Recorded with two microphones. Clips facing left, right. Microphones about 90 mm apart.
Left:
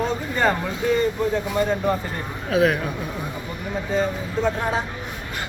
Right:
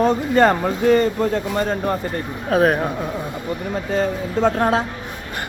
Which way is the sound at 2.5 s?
45° right (ahead or behind).